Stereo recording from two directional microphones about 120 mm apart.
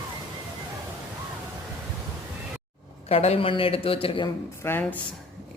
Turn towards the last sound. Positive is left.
turn(degrees=20)  # may be behind; listen again after turning